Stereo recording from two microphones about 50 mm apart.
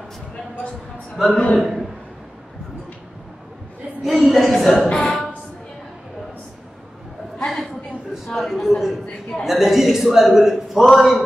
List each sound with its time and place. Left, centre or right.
1.3 s a man's voice: left
1.6 s speech: centre
4.0 s a woman's voice: centre
5.0 s a sound: centre
7.3 s a sound: centre
9.4 s a man's voice: centre
10.9 s a man's voice: centre